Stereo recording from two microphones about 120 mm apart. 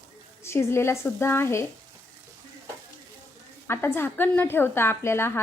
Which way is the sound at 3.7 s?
20° left (ahead or behind).